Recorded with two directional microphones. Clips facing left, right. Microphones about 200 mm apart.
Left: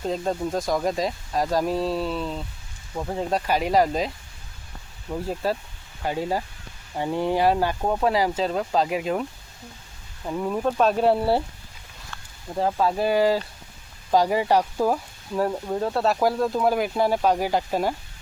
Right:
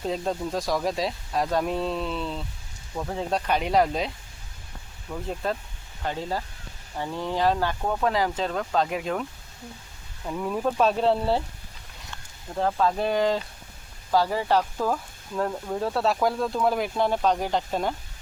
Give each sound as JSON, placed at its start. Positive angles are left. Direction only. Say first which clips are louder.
{"t": 0.0, "sound": "speech", "louder": "left 2 dB", "side_deg": 0}
{"t": 5.2, "sound": "speech", "louder": "left 2 dB", "side_deg": 5}
{"t": 8.1, "sound": "speech", "louder": "left 3 dB", "side_deg": 10}
{"t": 10.2, "sound": "speech", "louder": "left 2 dB", "side_deg": 10}
{"t": 12.5, "sound": "speech", "louder": "left 1 dB", "side_deg": 10}
{"t": 15.8, "sound": "speech", "louder": "left 2 dB", "side_deg": 0}